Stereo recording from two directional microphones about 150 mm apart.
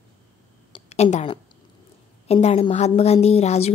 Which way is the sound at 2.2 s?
45° left (ahead or behind).